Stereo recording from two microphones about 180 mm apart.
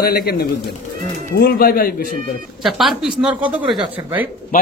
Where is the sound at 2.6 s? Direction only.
Centre (ahead or behind).